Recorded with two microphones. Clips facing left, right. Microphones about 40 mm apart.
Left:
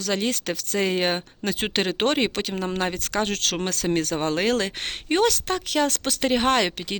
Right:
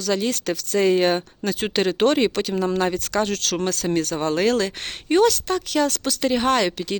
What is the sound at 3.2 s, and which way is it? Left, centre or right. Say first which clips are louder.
Speech: right 2 dB; left.